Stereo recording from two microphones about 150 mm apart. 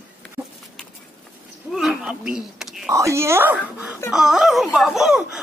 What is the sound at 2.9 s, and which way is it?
Speech, 20° right (ahead or behind).